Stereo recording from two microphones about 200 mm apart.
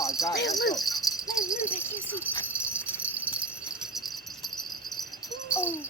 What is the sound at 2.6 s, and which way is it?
Jingle bell, 5° right (ahead or behind).